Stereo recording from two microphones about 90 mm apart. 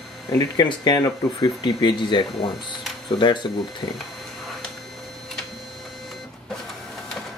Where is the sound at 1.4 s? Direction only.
55° left (ahead or behind).